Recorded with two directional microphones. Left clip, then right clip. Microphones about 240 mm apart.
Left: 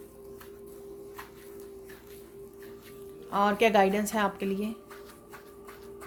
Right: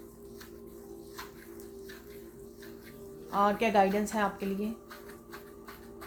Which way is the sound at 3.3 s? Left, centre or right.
Left.